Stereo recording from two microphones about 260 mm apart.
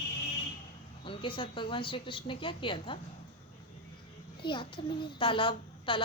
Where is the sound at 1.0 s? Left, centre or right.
Centre.